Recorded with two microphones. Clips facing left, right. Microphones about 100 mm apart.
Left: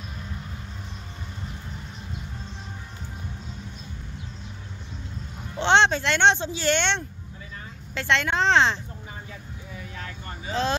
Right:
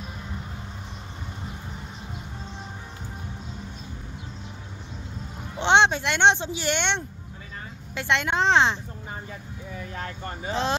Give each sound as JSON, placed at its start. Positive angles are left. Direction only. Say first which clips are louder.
{"t": 5.6, "sound": "a woman's voice", "louder": "even", "side_deg": -15}
{"t": 9.9, "sound": "vehicle", "louder": "right 5 dB", "side_deg": -40}
{"t": 10.5, "sound": "speech", "louder": "left 1 dB", "side_deg": -20}